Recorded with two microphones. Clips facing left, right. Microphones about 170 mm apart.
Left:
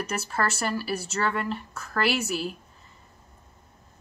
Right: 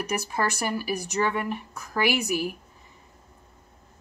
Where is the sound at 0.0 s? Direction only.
15° right (ahead or behind).